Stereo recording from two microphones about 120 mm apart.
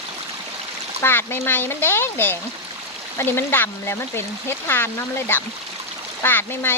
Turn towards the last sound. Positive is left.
turn(degrees=20)  # may be behind; listen again after turning